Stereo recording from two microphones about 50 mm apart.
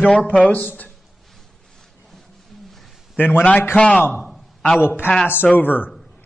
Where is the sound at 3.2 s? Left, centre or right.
Left.